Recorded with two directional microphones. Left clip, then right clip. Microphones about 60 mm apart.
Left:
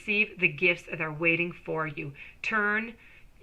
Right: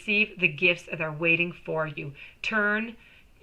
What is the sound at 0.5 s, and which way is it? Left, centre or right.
Speech, left.